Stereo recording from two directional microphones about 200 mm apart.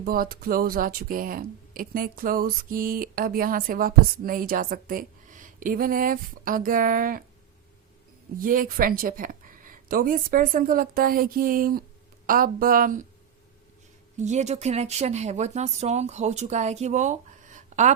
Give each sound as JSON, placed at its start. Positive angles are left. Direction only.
{"t": 0.0, "sound": "speech", "side_deg": -45}
{"t": 8.4, "sound": "a woman's voice", "side_deg": -45}
{"t": 14.2, "sound": "speech", "side_deg": -35}